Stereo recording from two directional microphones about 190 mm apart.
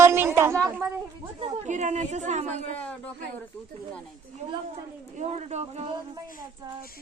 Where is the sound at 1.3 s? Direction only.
35° right (ahead or behind).